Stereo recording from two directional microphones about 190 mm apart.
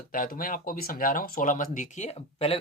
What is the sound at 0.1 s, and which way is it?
Speech, 50° left (ahead or behind).